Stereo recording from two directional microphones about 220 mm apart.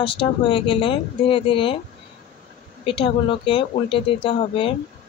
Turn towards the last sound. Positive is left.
turn(degrees=25)  # may be behind; listen again after turning